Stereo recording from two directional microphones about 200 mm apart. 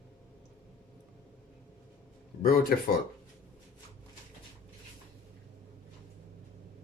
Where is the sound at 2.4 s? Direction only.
45° left (ahead or behind).